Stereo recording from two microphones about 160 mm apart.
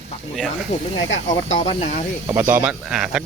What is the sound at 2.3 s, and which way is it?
Speech, 15° right (ahead or behind).